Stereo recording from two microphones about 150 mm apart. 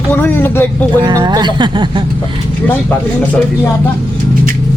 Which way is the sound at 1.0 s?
30° right (ahead or behind).